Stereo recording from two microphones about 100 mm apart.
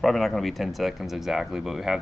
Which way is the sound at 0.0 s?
Centre (ahead or behind).